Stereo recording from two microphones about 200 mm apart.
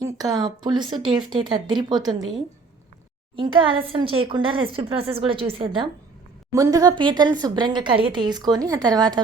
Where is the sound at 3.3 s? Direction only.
25° right (ahead or behind).